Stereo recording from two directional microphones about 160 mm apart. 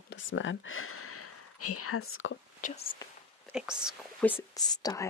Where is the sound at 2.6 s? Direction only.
55° left (ahead or behind).